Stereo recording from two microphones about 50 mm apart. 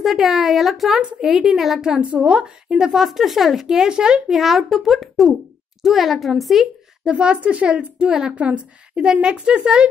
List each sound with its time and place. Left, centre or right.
0.0 s a woman's voice: centre
2.0 s speech: right
2.9 s a woman's voice: centre
7.1 s speech: right
8.1 s speech: centre
8.4 s speech: right